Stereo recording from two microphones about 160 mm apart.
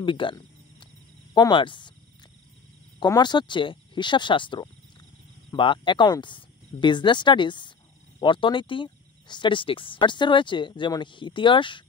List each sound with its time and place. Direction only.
0.0 s a sound: 30° left (ahead or behind)
1.3 s speech: 30° left (ahead or behind)
3.0 s speech: 25° left (ahead or behind)